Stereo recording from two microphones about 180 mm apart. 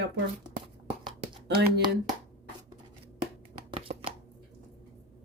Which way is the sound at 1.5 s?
65° right (ahead or behind).